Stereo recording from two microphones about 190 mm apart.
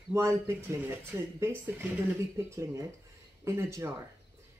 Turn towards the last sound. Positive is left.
turn(degrees=-15)  # may be behind; listen again after turning